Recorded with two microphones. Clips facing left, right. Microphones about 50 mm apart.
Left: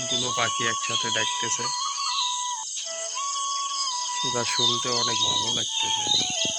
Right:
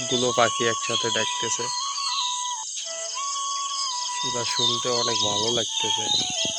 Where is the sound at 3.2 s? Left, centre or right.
Centre.